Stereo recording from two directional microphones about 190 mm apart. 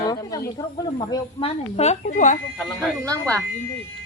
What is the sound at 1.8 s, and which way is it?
Speech, 40° left (ahead or behind).